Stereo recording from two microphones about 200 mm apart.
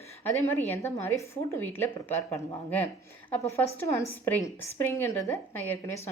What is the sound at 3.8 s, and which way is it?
A woman's voice, 15° left (ahead or behind).